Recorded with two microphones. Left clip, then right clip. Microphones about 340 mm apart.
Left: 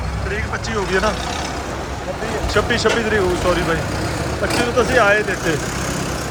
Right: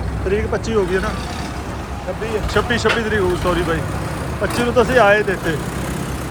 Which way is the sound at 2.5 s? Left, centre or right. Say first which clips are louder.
Left 1 dB; centre.